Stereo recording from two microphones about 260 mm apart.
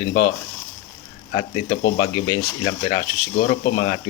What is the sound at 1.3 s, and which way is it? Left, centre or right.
Speech, centre.